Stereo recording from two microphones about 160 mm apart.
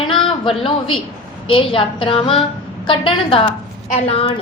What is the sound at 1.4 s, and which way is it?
A woman's voice, 35° left (ahead or behind).